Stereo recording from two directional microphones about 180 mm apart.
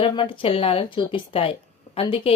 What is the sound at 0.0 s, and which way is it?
A woman's voice, 30° left (ahead or behind).